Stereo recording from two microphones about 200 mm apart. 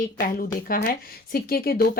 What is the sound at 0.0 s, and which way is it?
A woman's voice, 45° left (ahead or behind).